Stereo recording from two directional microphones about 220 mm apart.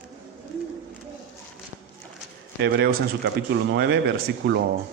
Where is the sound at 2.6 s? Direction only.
45° right (ahead or behind).